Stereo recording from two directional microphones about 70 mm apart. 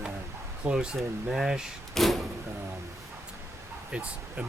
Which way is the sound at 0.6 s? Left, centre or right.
Centre.